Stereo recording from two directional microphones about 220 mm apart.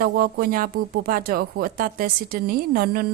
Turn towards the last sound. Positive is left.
turn(degrees=-45)  # may be behind; listen again after turning